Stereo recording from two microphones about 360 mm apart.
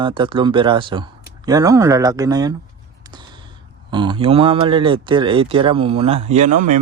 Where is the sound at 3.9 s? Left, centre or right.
Centre.